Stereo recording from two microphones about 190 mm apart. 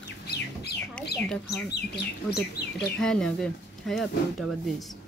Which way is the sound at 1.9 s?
60° left (ahead or behind).